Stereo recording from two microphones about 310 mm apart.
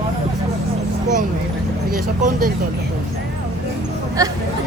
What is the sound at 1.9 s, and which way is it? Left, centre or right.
Speech, right.